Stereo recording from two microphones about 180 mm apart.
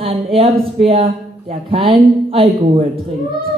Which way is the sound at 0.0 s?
30° right (ahead or behind).